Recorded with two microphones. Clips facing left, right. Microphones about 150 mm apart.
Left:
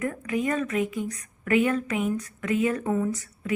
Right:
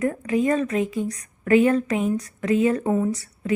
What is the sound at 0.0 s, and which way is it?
A woman's voice, 30° right (ahead or behind).